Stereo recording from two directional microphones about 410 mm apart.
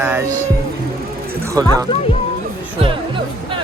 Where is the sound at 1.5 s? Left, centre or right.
Centre.